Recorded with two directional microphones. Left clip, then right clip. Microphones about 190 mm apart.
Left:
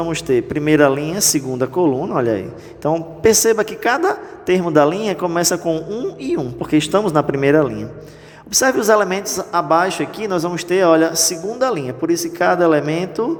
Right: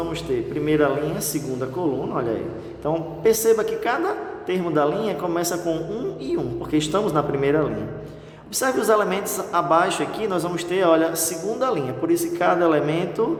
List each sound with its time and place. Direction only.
0.0 s a man's voice: 35° left (ahead or behind)